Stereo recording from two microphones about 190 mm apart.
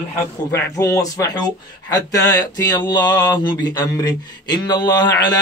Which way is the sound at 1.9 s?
20° left (ahead or behind).